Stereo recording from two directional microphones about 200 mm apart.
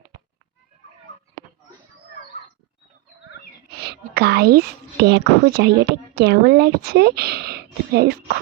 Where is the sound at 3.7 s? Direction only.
55° right (ahead or behind).